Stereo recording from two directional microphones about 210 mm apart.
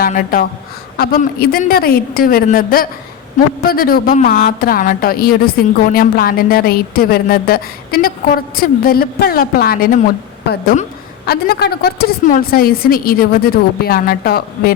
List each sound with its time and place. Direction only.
0.0 s speech: 45° left (ahead or behind)
11.3 s speech: 50° left (ahead or behind)